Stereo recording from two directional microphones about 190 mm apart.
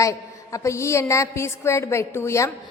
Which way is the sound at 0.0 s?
15° left (ahead or behind).